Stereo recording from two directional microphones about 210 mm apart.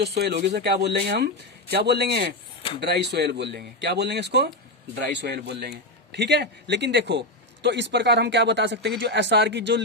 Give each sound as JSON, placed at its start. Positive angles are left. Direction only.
{"t": 0.2, "sound": "a man's voice", "side_deg": -50}